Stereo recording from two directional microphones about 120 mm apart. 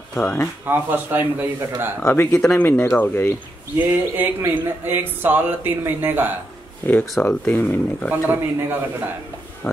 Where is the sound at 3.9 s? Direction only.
20° right (ahead or behind).